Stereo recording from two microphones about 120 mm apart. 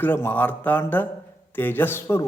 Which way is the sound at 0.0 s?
15° left (ahead or behind).